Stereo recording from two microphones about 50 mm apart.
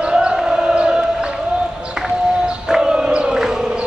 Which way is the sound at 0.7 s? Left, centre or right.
Centre.